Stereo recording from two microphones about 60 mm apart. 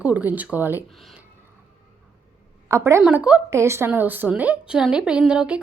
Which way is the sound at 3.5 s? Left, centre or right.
Right.